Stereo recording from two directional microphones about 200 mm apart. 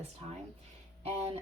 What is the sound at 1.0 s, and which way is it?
Speech, 30° right (ahead or behind).